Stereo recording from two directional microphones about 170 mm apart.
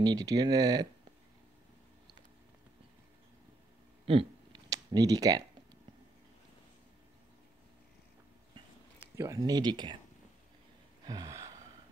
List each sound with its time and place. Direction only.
0.0 s speech: 20° right (ahead or behind)
4.1 s a sound: 30° right (ahead or behind)
4.6 s speech: 20° right (ahead or behind)
9.1 s speech: 20° right (ahead or behind)
11.1 s gasp: 20° right (ahead or behind)